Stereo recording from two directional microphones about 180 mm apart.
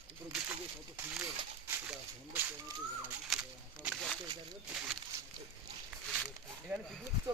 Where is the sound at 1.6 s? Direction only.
10° right (ahead or behind).